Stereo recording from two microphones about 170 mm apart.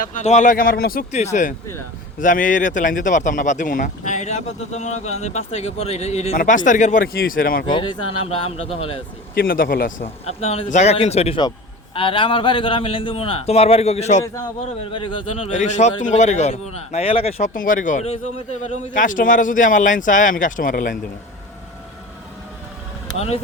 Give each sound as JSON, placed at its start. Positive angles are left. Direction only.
{"t": 0.0, "sound": "speech", "side_deg": 45}
{"t": 1.2, "sound": "speech", "side_deg": 45}
{"t": 6.3, "sound": "speech", "side_deg": 50}
{"t": 7.7, "sound": "a man's voice", "side_deg": 30}
{"t": 9.3, "sound": "speech", "side_deg": 60}
{"t": 10.0, "sound": "a man's voice", "side_deg": 35}
{"t": 14.9, "sound": "a man's voice", "side_deg": 30}
{"t": 17.5, "sound": "speech", "side_deg": 50}
{"t": 23.1, "sound": "a man's voice", "side_deg": 40}